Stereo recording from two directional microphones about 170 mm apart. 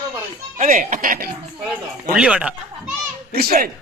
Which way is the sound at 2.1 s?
5° right (ahead or behind).